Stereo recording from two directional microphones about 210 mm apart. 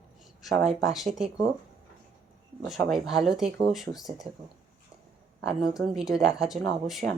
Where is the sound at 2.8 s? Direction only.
Centre (ahead or behind).